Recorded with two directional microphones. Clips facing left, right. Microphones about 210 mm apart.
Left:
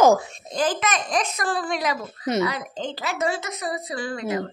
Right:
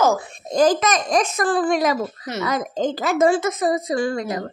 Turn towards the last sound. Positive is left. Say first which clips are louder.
# right 4 dB
turn(degrees=-45)  # may be behind; listen again after turning